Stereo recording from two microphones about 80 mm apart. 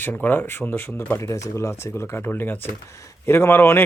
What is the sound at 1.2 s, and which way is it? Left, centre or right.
Speech, left.